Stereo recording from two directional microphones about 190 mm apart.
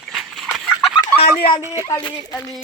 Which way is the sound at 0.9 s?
30° left (ahead or behind).